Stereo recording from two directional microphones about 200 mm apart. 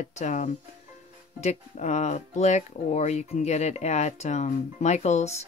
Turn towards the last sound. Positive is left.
turn(degrees=35)  # may be behind; listen again after turning